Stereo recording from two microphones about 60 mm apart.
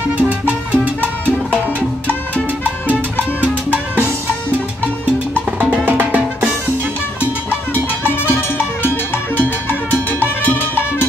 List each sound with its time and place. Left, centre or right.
0.2 s salsa music: right
3.3 s salsa music: right
5.9 s music: right
8.1 s music: left
10.2 s salsa music: left